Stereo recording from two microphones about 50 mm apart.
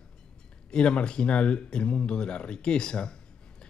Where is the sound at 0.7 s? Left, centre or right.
Centre.